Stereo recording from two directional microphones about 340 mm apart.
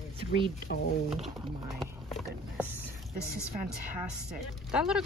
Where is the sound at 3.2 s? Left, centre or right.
Centre.